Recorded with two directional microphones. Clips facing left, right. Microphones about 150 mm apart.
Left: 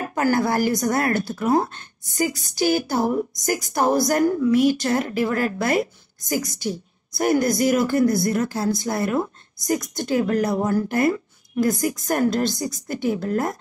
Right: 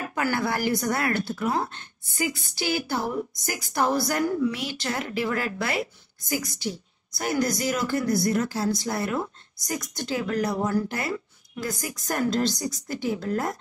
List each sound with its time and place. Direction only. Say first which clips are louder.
0.0 s a woman's voice: left 6 dB; 40° left (ahead or behind)